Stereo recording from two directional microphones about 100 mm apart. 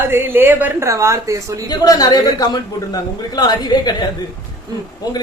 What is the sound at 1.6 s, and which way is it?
A man's voice, 40° left (ahead or behind).